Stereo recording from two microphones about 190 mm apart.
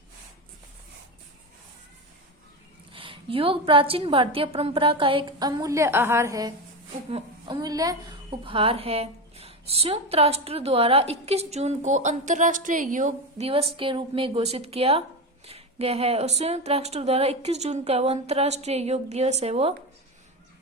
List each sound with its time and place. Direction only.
2.9 s a woman's voice: 30° right (ahead or behind)